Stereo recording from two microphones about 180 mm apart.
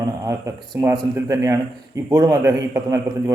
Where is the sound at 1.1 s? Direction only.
15° right (ahead or behind).